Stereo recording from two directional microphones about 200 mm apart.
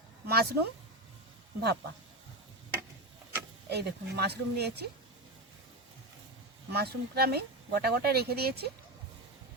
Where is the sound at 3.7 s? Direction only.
55° right (ahead or behind).